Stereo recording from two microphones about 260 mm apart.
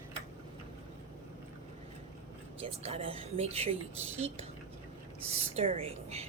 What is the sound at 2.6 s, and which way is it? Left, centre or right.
Speech, right.